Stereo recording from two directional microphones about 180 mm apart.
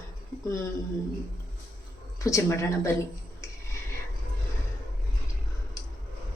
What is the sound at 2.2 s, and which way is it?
Speech, 15° left (ahead or behind).